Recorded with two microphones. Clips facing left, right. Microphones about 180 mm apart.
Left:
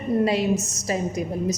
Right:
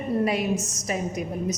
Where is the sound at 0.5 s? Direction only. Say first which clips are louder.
Left 2 dB; 5° left (ahead or behind).